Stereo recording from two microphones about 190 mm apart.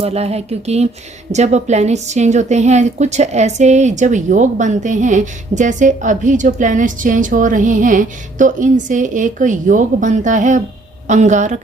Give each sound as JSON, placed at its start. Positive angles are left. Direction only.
{"t": 0.0, "sound": "a woman's voice", "side_deg": -35}